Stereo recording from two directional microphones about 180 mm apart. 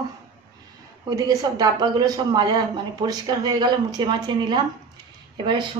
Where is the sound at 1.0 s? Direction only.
20° right (ahead or behind).